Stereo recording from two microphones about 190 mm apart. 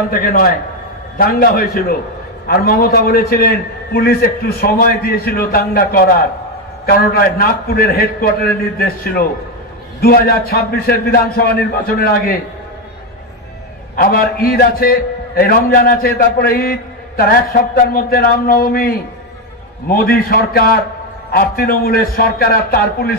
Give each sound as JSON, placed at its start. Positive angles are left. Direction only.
{"t": 0.1, "sound": "a man's voice", "side_deg": 45}
{"t": 13.9, "sound": "a man's voice", "side_deg": 50}